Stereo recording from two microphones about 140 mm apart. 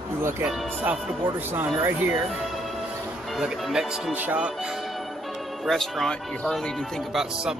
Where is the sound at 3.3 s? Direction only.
5° right (ahead or behind).